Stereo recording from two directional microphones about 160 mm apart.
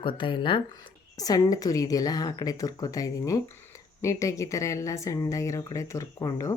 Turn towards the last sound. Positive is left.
turn(degrees=20)  # may be behind; listen again after turning